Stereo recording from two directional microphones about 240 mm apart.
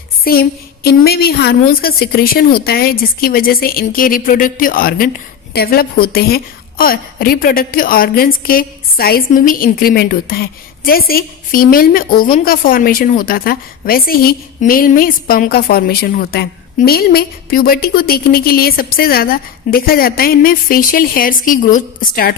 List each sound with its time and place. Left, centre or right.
0.3 s a woman's voice: left